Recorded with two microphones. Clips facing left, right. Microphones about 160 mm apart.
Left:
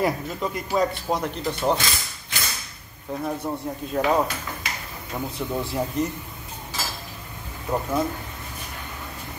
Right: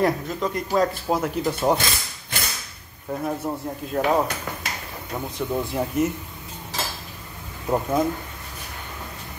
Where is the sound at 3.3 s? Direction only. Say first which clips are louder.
Even; 5° right (ahead or behind).